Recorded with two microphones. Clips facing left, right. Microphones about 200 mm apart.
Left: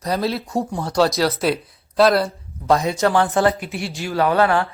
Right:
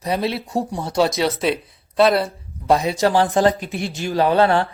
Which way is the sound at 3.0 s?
20° right (ahead or behind).